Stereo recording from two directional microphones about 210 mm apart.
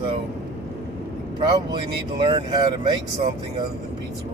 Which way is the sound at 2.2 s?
25° right (ahead or behind).